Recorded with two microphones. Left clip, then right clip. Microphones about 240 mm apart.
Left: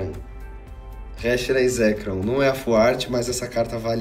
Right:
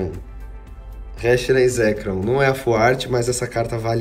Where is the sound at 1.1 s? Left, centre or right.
Centre.